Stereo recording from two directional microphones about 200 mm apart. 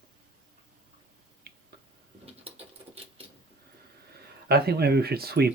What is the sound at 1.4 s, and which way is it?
Finger snapping, 50° right (ahead or behind).